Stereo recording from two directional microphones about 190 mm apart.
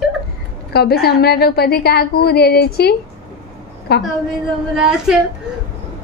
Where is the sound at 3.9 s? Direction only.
60° left (ahead or behind).